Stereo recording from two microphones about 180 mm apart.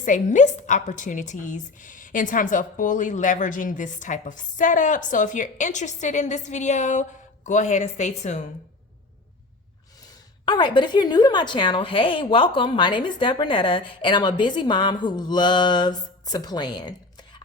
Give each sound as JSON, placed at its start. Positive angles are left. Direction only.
{"t": 0.0, "sound": "a woman's voice", "side_deg": 45}
{"t": 10.4, "sound": "a woman's voice", "side_deg": 25}